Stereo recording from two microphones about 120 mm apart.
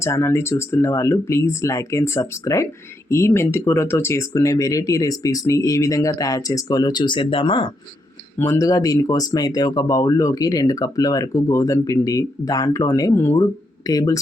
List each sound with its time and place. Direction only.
0.0 s speech: 20° left (ahead or behind); by 7.7 s 45° left (ahead or behind)
8.4 s speech: 20° left (ahead or behind)